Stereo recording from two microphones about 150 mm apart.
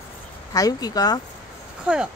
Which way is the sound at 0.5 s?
25° left (ahead or behind).